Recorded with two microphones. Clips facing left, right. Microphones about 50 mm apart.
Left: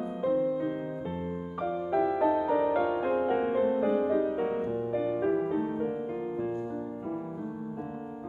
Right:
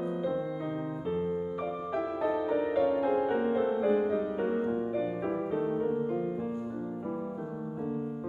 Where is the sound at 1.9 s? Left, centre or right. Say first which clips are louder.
Left 6 dB; centre.